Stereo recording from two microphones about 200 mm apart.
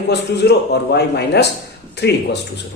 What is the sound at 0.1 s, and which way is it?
A man's voice, 55° left (ahead or behind).